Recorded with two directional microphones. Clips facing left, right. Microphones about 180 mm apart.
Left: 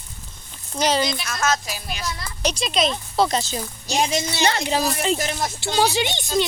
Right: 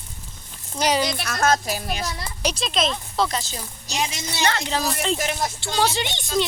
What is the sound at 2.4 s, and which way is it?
Speech, centre (ahead or behind).